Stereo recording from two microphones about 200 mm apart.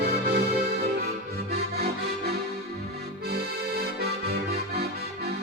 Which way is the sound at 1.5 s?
50° right (ahead or behind).